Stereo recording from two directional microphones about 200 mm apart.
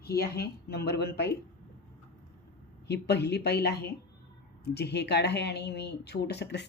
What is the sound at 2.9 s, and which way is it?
Speech, 55° left (ahead or behind).